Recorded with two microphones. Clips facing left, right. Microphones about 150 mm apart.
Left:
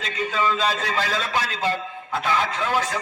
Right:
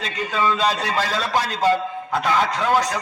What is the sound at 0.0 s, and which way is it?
A man's voice, 40° right (ahead or behind).